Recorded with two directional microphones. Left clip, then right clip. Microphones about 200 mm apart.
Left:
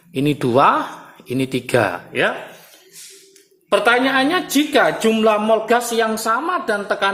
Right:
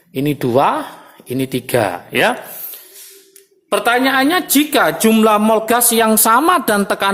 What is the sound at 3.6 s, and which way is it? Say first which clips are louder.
A woman's voice: right 1 dB; 15° right (ahead or behind).